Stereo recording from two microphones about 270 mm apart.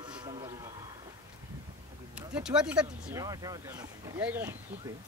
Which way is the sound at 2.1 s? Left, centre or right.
Centre.